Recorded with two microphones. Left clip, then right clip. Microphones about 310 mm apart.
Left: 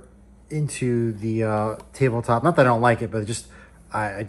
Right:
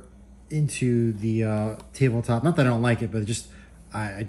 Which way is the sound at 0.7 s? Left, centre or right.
Centre.